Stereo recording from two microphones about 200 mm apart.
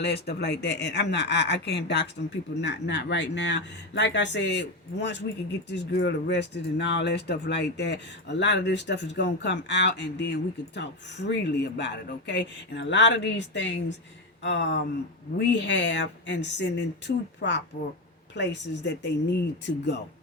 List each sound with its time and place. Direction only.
0.0 s speech: 55° left (ahead or behind)